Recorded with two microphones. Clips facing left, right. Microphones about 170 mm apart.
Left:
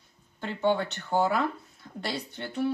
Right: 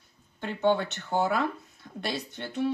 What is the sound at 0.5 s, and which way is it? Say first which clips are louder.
Speech: right 1 dB; 20° right (ahead or behind).